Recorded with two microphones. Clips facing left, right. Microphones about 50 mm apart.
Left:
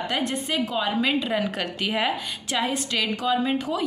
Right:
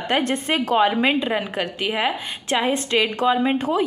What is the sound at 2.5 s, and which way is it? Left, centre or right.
A woman's voice, right.